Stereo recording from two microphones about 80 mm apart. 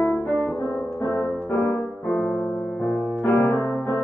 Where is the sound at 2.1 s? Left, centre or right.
Centre.